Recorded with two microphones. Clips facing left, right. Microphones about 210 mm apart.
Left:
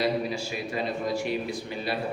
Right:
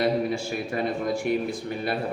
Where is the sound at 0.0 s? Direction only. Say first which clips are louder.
Right 3 dB; 55° right (ahead or behind).